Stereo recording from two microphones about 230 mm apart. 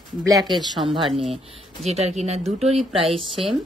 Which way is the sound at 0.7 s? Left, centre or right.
Right.